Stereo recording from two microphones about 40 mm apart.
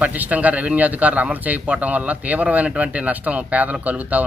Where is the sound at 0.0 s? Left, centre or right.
Right.